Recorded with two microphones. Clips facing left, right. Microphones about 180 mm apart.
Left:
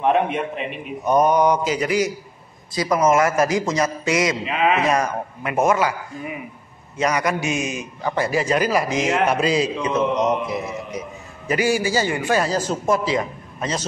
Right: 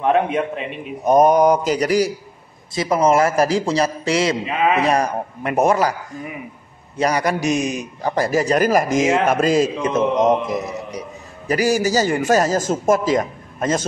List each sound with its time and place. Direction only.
1.0 s a man's voice: 45° right (ahead or behind)
2.7 s a man's voice: 25° right (ahead or behind)
7.0 s a man's voice: 35° right (ahead or behind); by 13.8 s 50° right (ahead or behind)